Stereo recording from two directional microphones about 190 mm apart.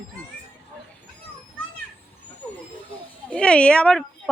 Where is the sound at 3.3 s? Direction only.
5° left (ahead or behind).